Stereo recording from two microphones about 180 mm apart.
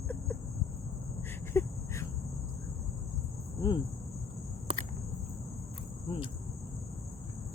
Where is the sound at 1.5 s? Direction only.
15° left (ahead or behind).